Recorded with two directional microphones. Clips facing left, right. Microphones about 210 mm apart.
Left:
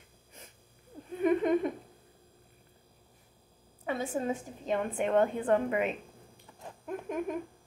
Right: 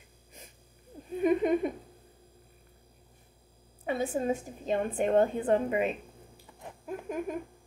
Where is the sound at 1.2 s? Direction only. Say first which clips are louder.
Right 1 dB; 10° right (ahead or behind).